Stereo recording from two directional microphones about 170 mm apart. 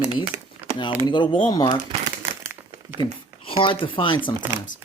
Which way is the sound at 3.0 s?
30° left (ahead or behind).